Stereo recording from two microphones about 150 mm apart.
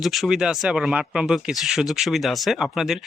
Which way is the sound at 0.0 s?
Centre (ahead or behind).